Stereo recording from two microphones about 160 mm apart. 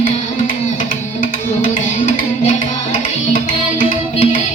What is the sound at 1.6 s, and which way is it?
Music, 50° left (ahead or behind).